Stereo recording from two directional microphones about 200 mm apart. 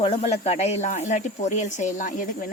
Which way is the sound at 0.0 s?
30° left (ahead or behind).